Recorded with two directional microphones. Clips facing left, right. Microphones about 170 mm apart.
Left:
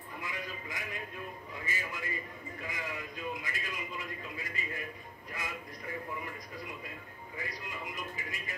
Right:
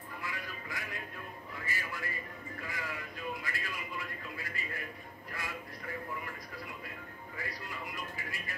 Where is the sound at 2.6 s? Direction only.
20° left (ahead or behind).